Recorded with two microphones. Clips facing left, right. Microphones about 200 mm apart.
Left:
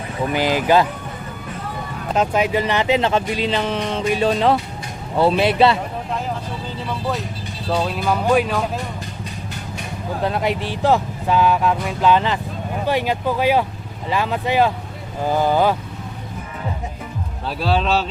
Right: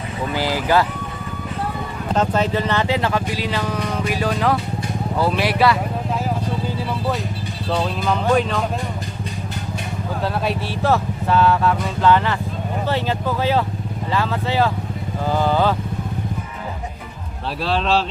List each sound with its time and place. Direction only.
0.3 s speech: 20° left (ahead or behind)
2.1 s speech: 10° left (ahead or behind)
7.7 s speech: 5° left (ahead or behind)
10.2 s speech: 15° left (ahead or behind)
17.6 s speech: centre (ahead or behind)